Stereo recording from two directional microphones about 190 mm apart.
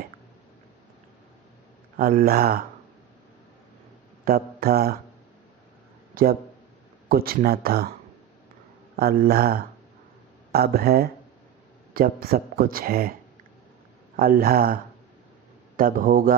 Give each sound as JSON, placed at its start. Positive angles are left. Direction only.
{"t": 2.0, "sound": "speech", "side_deg": -50}
{"t": 4.2, "sound": "speech", "side_deg": -50}
{"t": 6.2, "sound": "speech", "side_deg": -50}
{"t": 8.9, "sound": "speech", "side_deg": -50}
{"t": 14.1, "sound": "speech", "side_deg": -50}